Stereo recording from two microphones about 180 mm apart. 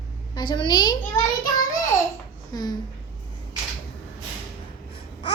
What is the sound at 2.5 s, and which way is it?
Speech, 20° left (ahead or behind).